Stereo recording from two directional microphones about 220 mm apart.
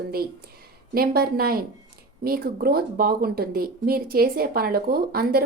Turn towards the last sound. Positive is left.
turn(degrees=-45)  # may be behind; listen again after turning